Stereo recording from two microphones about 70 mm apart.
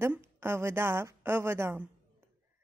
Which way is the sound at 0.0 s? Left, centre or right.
Right.